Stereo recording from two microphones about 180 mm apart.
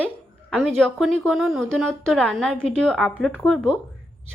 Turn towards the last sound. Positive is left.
turn(degrees=5)  # may be behind; listen again after turning